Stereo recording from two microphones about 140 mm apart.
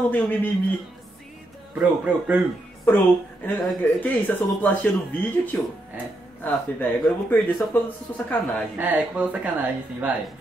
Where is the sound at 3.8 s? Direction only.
10° left (ahead or behind).